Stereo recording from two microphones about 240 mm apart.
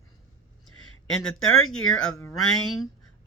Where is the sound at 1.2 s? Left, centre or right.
Left.